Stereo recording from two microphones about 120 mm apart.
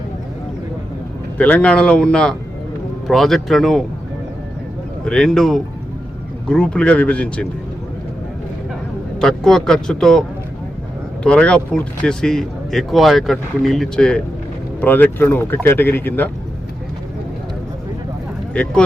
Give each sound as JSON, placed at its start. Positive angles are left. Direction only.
{"t": 1.4, "sound": "speech", "side_deg": 10}
{"t": 5.0, "sound": "speech", "side_deg": 5}
{"t": 9.1, "sound": "speech", "side_deg": 5}
{"t": 18.5, "sound": "speech", "side_deg": 10}